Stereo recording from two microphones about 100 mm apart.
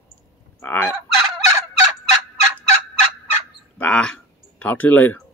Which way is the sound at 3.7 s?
10° left (ahead or behind).